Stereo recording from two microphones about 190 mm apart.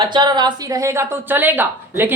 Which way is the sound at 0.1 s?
20° right (ahead or behind).